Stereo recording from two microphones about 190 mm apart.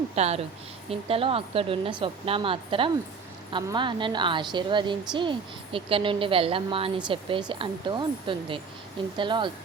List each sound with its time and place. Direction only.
0.2 s a woman's voice: 35° right (ahead or behind)